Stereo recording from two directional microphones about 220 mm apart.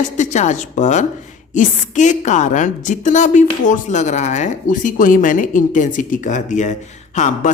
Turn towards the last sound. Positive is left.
turn(degrees=35)  # may be behind; listen again after turning